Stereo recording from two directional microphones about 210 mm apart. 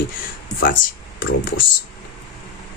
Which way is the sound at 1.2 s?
45° left (ahead or behind).